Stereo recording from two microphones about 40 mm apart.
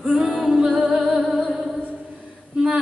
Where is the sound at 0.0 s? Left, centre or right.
Centre.